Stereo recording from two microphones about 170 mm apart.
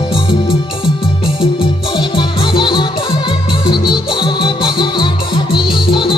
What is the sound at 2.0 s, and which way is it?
Music, 30° left (ahead or behind).